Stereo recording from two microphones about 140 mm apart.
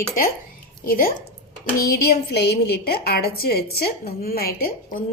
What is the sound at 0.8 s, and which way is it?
Speech, 90° left.